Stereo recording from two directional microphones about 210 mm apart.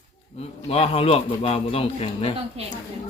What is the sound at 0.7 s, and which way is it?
A man's voice, 30° left (ahead or behind).